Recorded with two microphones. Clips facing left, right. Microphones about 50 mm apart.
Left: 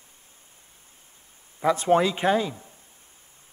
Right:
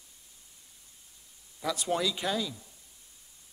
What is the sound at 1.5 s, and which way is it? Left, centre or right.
A man's voice, left.